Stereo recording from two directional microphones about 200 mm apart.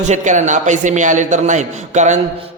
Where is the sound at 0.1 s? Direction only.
35° right (ahead or behind).